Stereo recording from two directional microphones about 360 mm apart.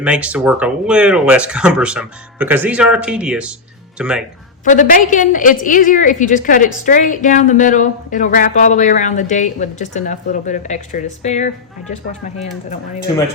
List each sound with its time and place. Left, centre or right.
0.0 s speech: centre
4.6 s speech: left